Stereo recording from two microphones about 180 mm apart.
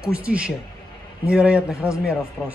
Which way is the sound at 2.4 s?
10° left (ahead or behind).